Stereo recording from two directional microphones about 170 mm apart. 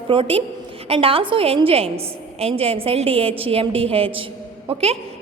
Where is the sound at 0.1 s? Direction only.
30° right (ahead or behind).